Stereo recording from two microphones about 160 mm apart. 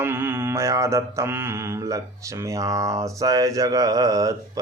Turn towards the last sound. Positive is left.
turn(degrees=-20)  # may be behind; listen again after turning